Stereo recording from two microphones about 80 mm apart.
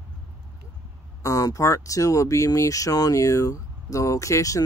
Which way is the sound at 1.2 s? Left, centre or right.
Left.